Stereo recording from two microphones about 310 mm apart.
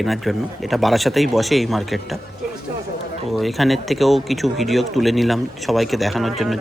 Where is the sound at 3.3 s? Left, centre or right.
Centre.